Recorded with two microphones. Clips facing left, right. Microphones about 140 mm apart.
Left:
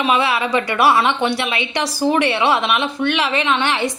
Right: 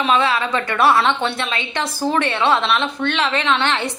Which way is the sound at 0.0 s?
10° left (ahead or behind).